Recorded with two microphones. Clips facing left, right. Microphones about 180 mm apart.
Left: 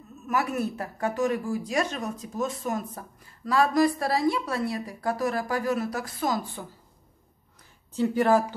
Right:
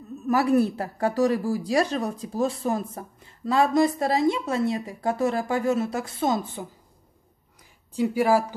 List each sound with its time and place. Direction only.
0.3 s a woman's voice: 35° right (ahead or behind)
7.9 s speech: 10° right (ahead or behind)